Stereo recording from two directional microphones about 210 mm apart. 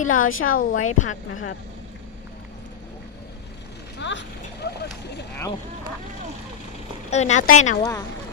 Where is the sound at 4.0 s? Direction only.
60° left (ahead or behind).